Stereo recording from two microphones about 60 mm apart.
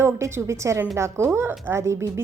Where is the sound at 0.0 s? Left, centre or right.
Right.